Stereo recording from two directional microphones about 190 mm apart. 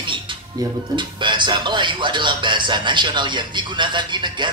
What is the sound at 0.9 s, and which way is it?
Speech, 25° right (ahead or behind).